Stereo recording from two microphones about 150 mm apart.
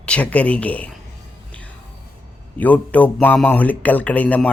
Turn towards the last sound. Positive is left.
turn(degrees=10)  # may be behind; listen again after turning